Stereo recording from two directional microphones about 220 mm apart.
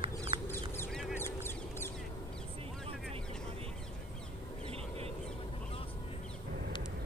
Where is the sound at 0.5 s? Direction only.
10° left (ahead or behind).